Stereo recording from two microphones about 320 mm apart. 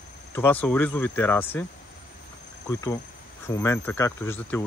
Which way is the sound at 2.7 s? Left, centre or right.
Centre.